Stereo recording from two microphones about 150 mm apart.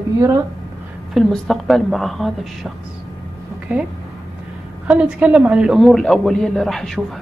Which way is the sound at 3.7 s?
10° right (ahead or behind).